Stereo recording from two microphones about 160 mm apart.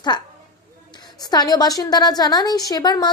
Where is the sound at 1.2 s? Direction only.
25° left (ahead or behind).